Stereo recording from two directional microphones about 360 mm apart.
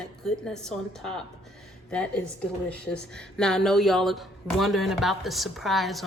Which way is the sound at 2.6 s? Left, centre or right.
Centre.